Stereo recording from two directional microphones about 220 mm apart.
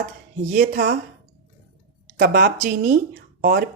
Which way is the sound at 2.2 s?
40° right (ahead or behind).